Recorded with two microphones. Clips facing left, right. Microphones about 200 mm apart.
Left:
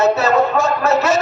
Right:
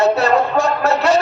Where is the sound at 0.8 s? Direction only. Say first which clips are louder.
Right 1 dB; 20° left (ahead or behind).